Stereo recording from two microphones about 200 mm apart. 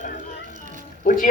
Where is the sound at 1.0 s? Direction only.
45° left (ahead or behind).